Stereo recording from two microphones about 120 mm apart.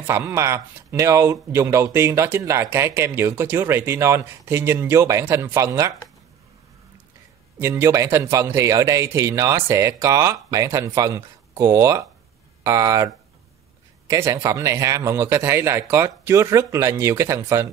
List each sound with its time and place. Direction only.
0.0 s speech: 20° right (ahead or behind)
7.5 s speech: 20° right (ahead or behind)